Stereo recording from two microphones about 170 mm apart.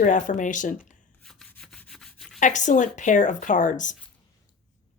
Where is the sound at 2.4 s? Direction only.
45° left (ahead or behind).